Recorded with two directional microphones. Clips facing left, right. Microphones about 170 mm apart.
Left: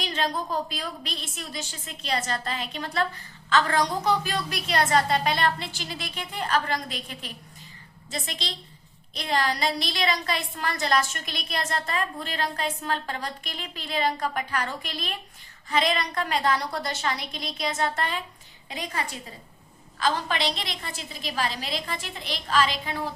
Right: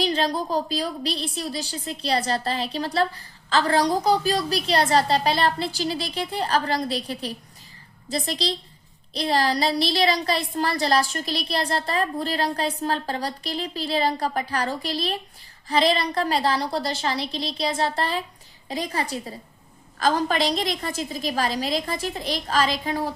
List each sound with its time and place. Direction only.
0.0 s a woman's voice: 35° right (ahead or behind)